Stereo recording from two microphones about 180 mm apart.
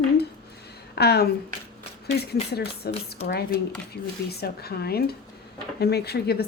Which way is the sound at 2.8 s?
60° left (ahead or behind).